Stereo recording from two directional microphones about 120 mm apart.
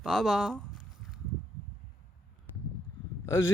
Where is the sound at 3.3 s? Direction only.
25° left (ahead or behind).